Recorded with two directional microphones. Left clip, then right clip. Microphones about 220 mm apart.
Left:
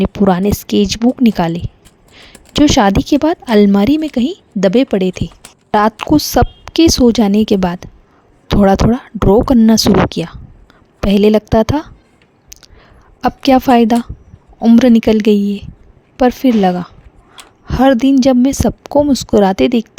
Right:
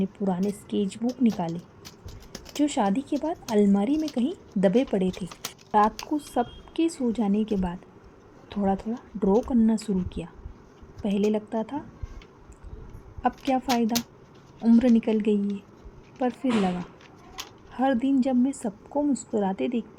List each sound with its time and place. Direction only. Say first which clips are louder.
0.0 s speech: left 16 dB; 50° left (ahead or behind)
13.2 s speech: left 14 dB; 50° left (ahead or behind)